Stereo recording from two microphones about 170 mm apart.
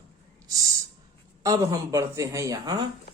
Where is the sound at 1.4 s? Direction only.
20° right (ahead or behind).